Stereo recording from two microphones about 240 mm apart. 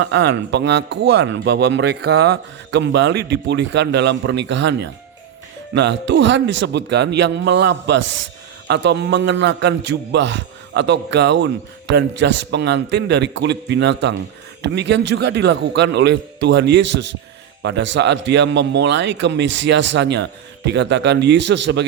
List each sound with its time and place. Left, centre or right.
0.0 s speech: right